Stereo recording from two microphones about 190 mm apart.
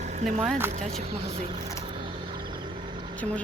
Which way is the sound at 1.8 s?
25° right (ahead or behind).